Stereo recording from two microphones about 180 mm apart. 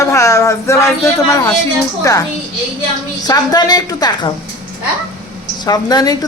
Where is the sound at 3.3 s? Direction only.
20° left (ahead or behind).